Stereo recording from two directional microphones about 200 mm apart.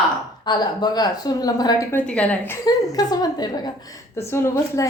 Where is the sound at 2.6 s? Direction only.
20° left (ahead or behind).